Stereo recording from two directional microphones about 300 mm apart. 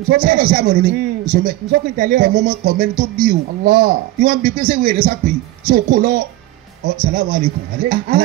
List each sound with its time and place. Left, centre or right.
0.1 s a man's voice: right